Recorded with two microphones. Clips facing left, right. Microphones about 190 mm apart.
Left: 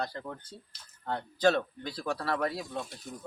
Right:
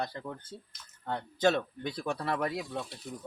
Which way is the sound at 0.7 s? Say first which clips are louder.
Right 2 dB; 30° left (ahead or behind).